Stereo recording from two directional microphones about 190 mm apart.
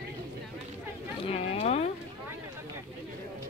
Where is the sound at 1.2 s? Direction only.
30° left (ahead or behind).